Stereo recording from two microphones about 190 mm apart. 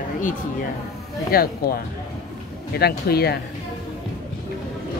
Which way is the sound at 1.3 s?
55° left (ahead or behind).